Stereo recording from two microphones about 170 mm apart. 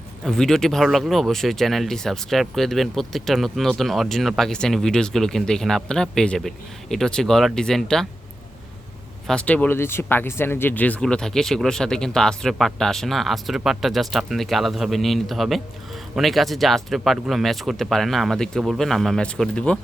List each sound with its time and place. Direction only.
0.3 s speech: 5° left (ahead or behind)
9.2 s speech: 5° left (ahead or behind)